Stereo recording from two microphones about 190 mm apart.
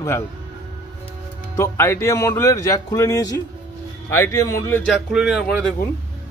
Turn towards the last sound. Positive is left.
turn(degrees=0)  # may be behind; listen again after turning